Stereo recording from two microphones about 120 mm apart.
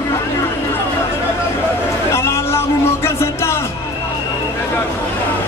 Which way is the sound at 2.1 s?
20° left (ahead or behind).